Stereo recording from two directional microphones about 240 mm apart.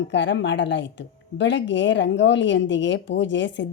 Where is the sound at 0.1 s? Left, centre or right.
Left.